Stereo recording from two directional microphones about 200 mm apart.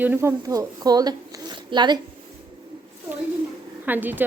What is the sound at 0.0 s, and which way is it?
Speech, 10° right (ahead or behind).